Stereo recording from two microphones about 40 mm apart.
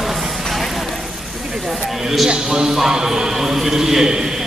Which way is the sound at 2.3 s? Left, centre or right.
Centre.